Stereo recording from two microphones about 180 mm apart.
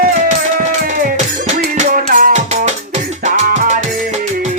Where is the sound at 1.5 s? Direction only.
45° right (ahead or behind).